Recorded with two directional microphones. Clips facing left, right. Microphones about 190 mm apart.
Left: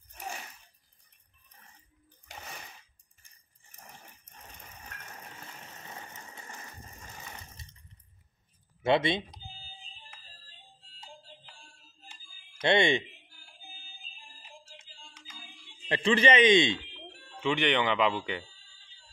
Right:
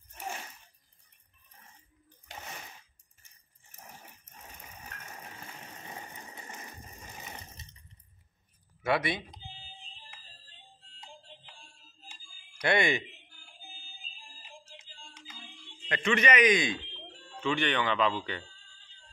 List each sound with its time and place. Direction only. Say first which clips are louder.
4.3 s vehicle: right 1 dB; 5° right (ahead or behind)
8.8 s speech: left 4 dB; 25° left (ahead or behind)
9.4 s fire alarm: even; centre (ahead or behind)
10.9 s music: left 1 dB; 5° left (ahead or behind)
12.5 s speech: left 3 dB; 25° left (ahead or behind)
13.3 s a sound: even; 5° left (ahead or behind)
14.7 s typing: right 1 dB; 5° left (ahead or behind)
15.9 s a man's voice: left 3 dB; 30° left (ahead or behind); by 18.9 s 10° left (ahead or behind)